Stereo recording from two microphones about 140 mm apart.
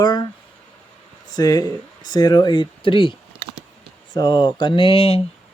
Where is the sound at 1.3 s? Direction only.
30° left (ahead or behind).